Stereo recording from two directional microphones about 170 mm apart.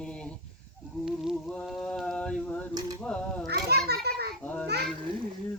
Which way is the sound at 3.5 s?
70° right (ahead or behind).